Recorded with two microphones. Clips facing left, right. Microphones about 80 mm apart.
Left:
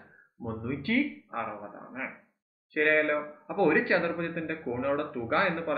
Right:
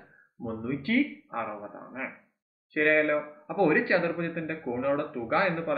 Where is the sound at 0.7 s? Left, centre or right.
Right.